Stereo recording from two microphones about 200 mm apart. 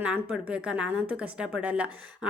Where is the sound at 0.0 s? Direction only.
5° right (ahead or behind).